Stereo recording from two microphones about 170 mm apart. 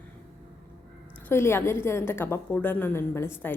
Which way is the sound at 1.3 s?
15° left (ahead or behind).